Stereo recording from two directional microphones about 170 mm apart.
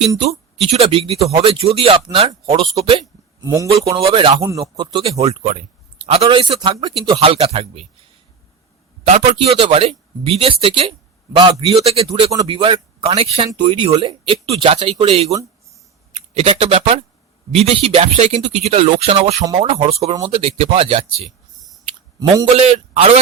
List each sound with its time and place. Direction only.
0.6 s speech: 35° right (ahead or behind)
3.4 s speech: 15° right (ahead or behind)
4.0 s speech: 30° right (ahead or behind)
9.0 s speech: 40° right (ahead or behind)
12.3 s speech: 25° right (ahead or behind)
22.4 s speech: 40° right (ahead or behind)